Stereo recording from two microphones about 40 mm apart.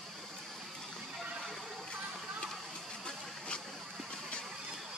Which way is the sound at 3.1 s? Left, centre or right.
Left.